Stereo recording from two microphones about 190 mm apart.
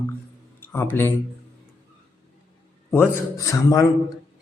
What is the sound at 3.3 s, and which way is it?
Speech, 15° left (ahead or behind).